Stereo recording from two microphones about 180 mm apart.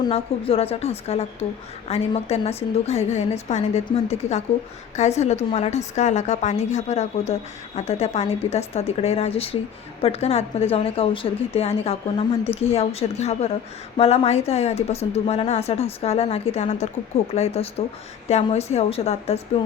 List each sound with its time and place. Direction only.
0.0 s a woman's voice: 30° left (ahead or behind)